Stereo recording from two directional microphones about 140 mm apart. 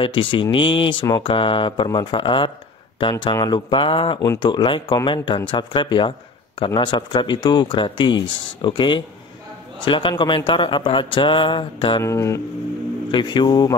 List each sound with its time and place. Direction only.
0.0 s speech: 35° left (ahead or behind)
12.0 s speech: 20° left (ahead or behind)
13.1 s speech: 35° left (ahead or behind)